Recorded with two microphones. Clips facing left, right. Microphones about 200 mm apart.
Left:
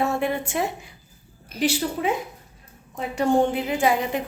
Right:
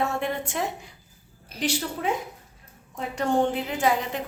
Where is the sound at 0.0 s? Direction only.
5° left (ahead or behind).